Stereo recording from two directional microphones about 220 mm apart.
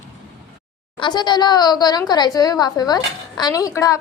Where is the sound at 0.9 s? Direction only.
20° left (ahead or behind).